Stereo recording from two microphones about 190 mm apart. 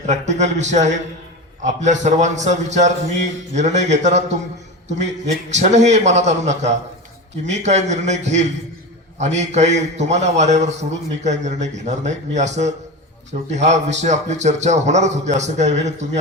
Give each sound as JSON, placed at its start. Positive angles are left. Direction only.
{"t": 0.0, "sound": "a man's voice", "side_deg": -35}
{"t": 5.3, "sound": "a man's voice", "side_deg": -40}